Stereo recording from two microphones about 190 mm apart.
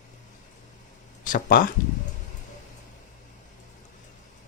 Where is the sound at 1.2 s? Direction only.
45° left (ahead or behind).